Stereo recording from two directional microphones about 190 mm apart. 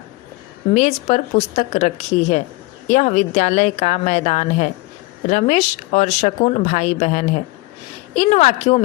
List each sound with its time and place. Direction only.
0.7 s speech: 35° left (ahead or behind)